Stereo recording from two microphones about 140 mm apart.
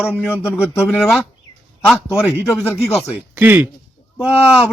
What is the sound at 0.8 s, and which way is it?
Speech, 5° right (ahead or behind).